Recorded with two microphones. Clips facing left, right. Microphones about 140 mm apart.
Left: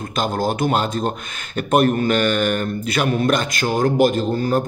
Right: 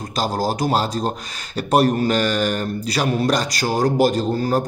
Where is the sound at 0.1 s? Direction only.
35° right (ahead or behind).